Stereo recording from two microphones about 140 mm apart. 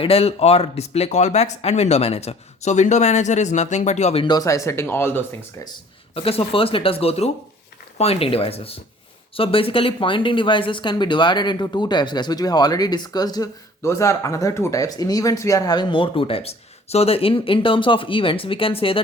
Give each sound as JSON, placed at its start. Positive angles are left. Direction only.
{"t": 0.0, "sound": "speech", "side_deg": 45}
{"t": 4.3, "sound": "speech", "side_deg": 25}
{"t": 6.1, "sound": "speech", "side_deg": 45}